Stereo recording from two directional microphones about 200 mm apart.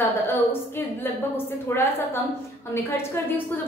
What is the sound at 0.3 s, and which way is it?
A woman's voice, 10° left (ahead or behind).